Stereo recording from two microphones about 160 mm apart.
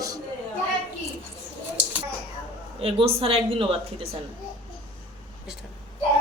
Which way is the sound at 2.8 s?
35° right (ahead or behind).